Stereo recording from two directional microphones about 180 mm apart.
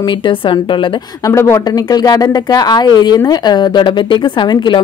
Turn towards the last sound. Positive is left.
turn(degrees=25)  # may be behind; listen again after turning